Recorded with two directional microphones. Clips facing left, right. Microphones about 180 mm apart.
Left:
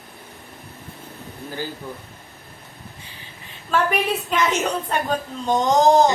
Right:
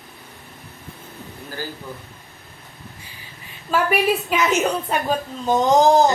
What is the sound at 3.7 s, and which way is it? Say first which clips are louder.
A woman's voice: right 2 dB; 10° right (ahead or behind).